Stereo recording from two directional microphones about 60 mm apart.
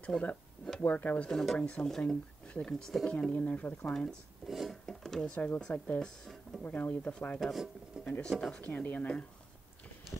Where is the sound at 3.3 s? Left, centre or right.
Left.